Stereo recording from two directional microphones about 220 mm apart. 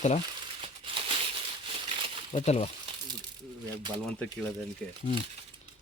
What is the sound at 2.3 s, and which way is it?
Speech, 30° left (ahead or behind).